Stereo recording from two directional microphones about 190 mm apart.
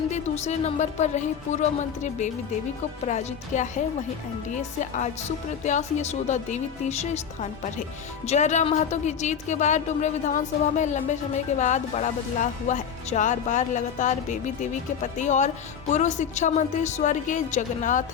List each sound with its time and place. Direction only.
0.1 s a woman's voice: 35° left (ahead or behind)
8.3 s a woman's voice: 40° left (ahead or behind)